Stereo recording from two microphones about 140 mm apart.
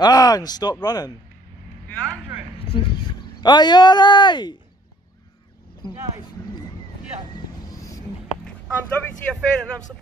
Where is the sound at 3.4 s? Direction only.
30° left (ahead or behind).